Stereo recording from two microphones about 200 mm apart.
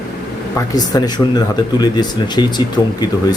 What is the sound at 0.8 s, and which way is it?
Speech, 20° left (ahead or behind).